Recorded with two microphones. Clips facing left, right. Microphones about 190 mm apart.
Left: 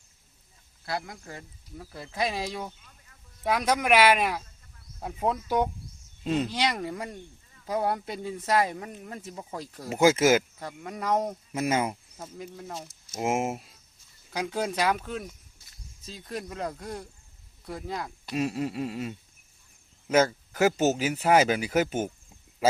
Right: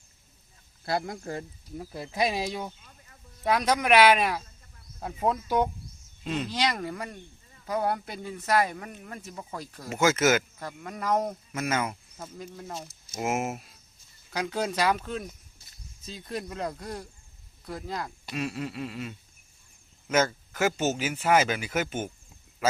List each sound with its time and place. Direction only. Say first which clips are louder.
0.9 s speech: right 5 dB; 30° right (ahead or behind)
1.9 s speech: right 2 dB; 15° right (ahead or behind); by 5.6 s 10° left (ahead or behind)
6.2 s speech: left 4 dB; 35° left (ahead or behind)
6.5 s speech: even; 10° left (ahead or behind)
10.0 s speech: left 3 dB; 30° left (ahead or behind)
10.6 s speech: left 1 dB; 15° left (ahead or behind)
13.1 s speech: left 2 dB; 25° left (ahead or behind)
14.3 s speech: even; 5° left (ahead or behind)
18.3 s speech: left 4 dB; 40° left (ahead or behind)